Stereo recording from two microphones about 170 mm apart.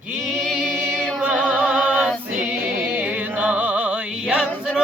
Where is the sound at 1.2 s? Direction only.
10° right (ahead or behind).